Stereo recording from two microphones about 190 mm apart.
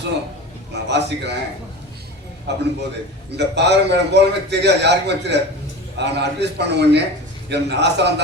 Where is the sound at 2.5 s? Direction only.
65° right (ahead or behind).